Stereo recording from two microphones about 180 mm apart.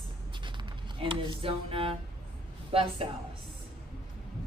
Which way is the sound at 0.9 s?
30° right (ahead or behind).